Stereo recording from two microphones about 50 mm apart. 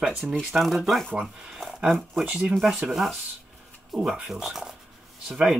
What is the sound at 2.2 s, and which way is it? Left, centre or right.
Speech, right.